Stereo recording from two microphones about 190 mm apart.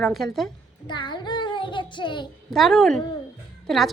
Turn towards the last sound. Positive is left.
turn(degrees=0)  # may be behind; listen again after turning